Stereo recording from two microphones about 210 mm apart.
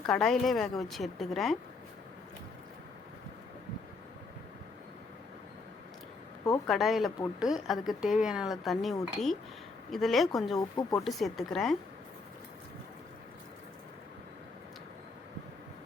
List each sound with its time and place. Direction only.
0.1 s speech: centre (ahead or behind)
6.7 s speech: centre (ahead or behind)
10.6 s speech: 15° left (ahead or behind)
11.0 s speech: centre (ahead or behind)